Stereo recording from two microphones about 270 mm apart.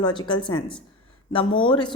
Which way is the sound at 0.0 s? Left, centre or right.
Centre.